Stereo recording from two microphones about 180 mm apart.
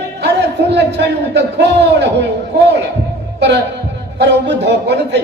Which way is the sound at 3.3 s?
70° right (ahead or behind).